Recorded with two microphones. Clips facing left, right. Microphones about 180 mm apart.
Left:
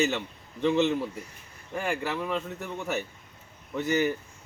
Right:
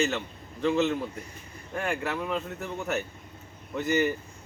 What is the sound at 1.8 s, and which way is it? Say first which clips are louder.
Speech: even; centre (ahead or behind).